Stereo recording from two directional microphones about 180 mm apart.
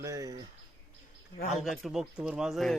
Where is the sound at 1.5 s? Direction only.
Centre (ahead or behind).